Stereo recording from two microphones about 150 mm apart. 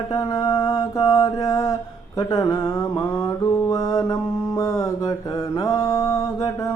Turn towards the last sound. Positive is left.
turn(degrees=25)  # may be behind; listen again after turning